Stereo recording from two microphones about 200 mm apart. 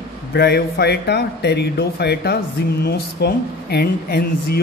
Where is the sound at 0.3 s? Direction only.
55° left (ahead or behind).